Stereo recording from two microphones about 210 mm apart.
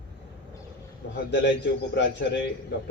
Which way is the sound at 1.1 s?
55° left (ahead or behind).